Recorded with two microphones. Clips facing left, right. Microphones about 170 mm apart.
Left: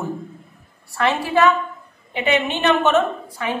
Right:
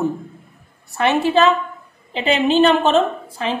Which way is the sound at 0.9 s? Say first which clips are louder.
Right 3 dB; 20° right (ahead or behind).